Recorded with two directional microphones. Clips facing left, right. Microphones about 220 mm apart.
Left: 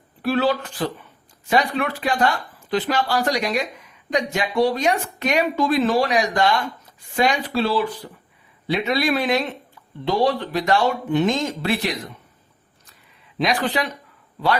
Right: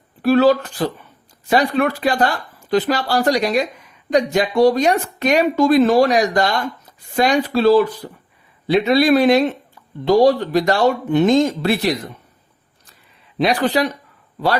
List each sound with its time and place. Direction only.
0.2 s speech: 45° right (ahead or behind)
13.4 s speech: 35° right (ahead or behind)